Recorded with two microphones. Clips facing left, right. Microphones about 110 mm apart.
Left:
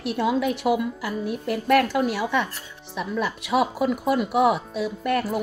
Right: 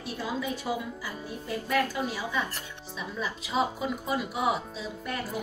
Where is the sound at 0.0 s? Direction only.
70° left (ahead or behind).